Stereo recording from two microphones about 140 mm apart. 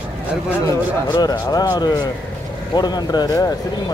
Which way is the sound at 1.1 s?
30° left (ahead or behind).